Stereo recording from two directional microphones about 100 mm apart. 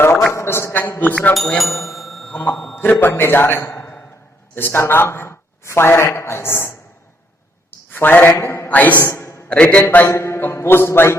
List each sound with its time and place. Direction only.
0.3 s speech: 25° left (ahead or behind)
1.3 s bicycle bell: centre (ahead or behind)
2.3 s a man's voice: 15° left (ahead or behind)
9.5 s speech: 15° left (ahead or behind)